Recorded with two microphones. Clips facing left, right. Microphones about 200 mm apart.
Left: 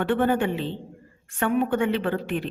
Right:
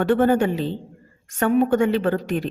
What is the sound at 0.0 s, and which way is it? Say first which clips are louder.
A woman's voice: right 5 dB; 40° right (ahead or behind).